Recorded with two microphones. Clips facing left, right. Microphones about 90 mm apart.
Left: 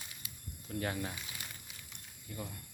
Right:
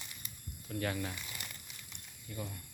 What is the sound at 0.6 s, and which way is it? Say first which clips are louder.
Speech: even; 30° left (ahead or behind).